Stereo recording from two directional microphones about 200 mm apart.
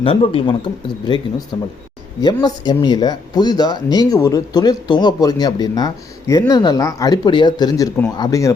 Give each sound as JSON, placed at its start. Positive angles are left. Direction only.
{"t": 0.0, "sound": "speech", "side_deg": 25}